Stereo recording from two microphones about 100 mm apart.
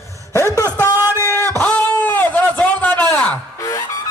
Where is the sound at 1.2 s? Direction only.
30° right (ahead or behind).